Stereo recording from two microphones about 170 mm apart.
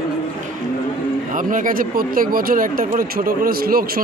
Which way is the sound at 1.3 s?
50° right (ahead or behind).